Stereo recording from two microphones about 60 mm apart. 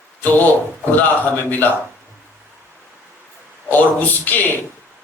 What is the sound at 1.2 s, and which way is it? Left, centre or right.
Speech, left.